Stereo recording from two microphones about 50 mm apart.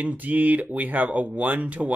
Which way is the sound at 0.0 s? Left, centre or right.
Right.